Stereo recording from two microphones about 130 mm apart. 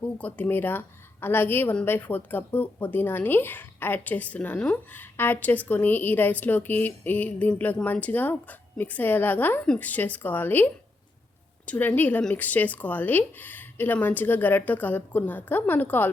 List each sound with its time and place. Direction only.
0.0 s a woman's voice: 10° left (ahead or behind)